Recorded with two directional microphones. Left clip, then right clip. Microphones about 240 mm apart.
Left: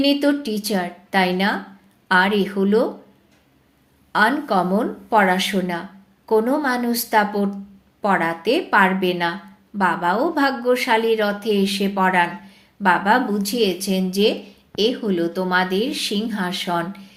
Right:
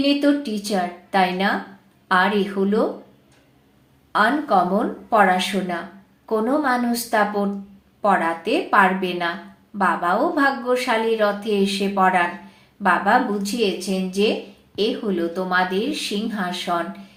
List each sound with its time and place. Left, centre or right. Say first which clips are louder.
0.0 s a woman's voice: left 1 dB; left
4.1 s a woman's voice: even; left